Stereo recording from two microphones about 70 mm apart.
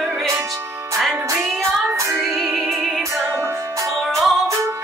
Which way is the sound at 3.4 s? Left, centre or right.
Right.